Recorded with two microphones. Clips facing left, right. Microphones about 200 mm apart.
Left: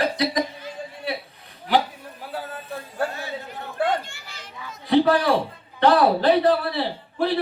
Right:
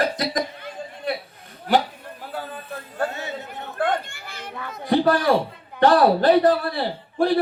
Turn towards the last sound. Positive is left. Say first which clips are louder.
# right 3 dB
turn(degrees=-45)  # may be behind; listen again after turning